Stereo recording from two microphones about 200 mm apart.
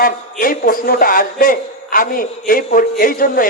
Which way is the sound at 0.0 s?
45° left (ahead or behind).